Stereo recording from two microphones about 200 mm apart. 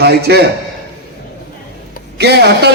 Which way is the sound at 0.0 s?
55° right (ahead or behind).